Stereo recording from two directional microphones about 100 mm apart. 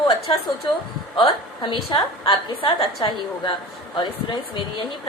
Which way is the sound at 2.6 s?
55° left (ahead or behind).